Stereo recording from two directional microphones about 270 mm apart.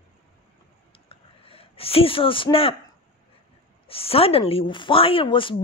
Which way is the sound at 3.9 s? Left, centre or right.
Left.